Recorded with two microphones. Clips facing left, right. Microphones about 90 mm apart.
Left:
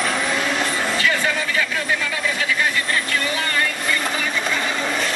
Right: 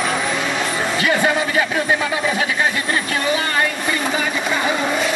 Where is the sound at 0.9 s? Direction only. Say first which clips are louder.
Right 6 dB; 20° right (ahead or behind).